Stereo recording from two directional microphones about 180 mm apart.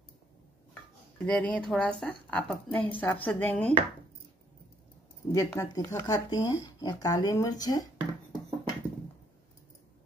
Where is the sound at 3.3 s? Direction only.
10° left (ahead or behind).